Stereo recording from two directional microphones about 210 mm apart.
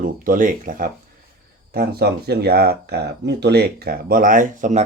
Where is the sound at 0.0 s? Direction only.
40° right (ahead or behind).